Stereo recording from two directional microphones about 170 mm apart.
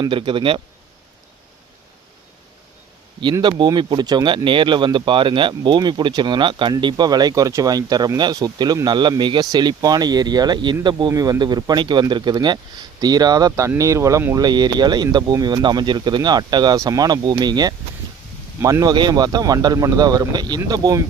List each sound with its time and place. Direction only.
0.0 s speech: 30° right (ahead or behind)
3.3 s speech: 25° right (ahead or behind)